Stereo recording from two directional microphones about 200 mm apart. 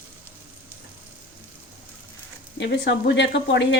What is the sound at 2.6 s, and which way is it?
Speech, 60° left (ahead or behind).